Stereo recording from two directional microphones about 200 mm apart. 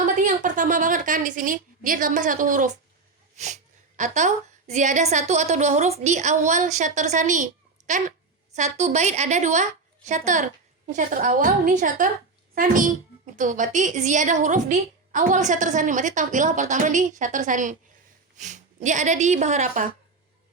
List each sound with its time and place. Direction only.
0.0 s a woman's voice: 40° right (ahead or behind)